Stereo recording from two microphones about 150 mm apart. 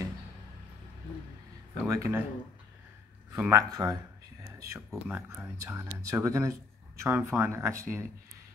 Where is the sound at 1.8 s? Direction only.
20° right (ahead or behind).